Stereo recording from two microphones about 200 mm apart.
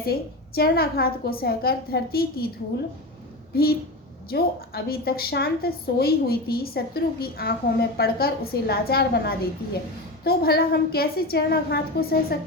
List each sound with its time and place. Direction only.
0.0 s a woman's voice: 50° left (ahead or behind)
3.5 s a woman's voice: 50° left (ahead or behind)